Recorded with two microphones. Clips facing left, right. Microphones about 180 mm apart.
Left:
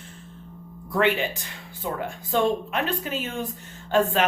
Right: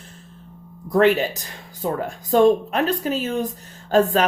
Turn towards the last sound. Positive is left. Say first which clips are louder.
# right 4 dB
turn(degrees=-40)  # may be behind; listen again after turning